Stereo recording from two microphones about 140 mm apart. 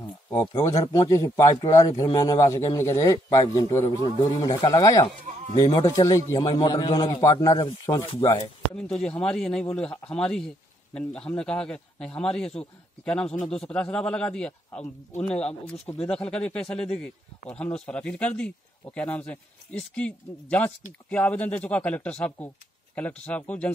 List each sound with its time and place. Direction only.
0.3 s a man's voice: 25° left (ahead or behind)
8.7 s a man's voice: 5° left (ahead or behind)